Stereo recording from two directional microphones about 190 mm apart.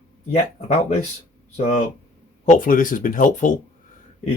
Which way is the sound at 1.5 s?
40° left (ahead or behind).